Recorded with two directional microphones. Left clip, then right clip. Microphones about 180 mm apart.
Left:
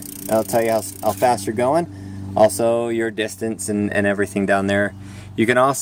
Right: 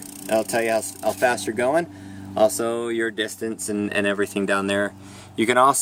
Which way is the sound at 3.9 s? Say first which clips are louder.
Left 3 dB; 10° left (ahead or behind).